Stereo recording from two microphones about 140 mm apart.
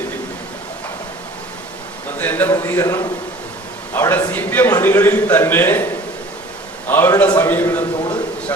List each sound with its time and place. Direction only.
2.1 s a man's voice: 10° left (ahead or behind)